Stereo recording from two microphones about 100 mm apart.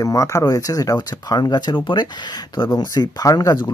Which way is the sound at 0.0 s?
30° left (ahead or behind).